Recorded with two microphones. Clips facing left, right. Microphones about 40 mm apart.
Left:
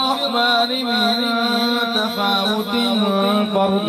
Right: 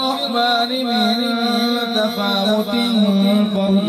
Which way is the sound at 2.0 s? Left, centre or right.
Centre.